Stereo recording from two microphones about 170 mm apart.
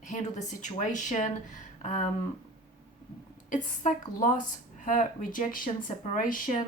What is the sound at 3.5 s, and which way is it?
Speech, 50° left (ahead or behind).